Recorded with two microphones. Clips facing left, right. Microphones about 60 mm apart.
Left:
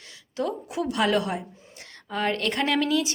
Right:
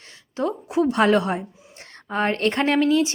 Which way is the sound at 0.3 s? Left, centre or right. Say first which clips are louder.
Right 6 dB; right.